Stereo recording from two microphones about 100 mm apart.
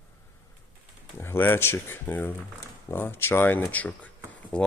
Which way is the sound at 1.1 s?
25° left (ahead or behind).